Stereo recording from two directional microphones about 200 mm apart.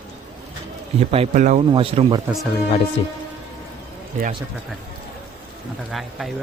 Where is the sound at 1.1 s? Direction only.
35° right (ahead or behind).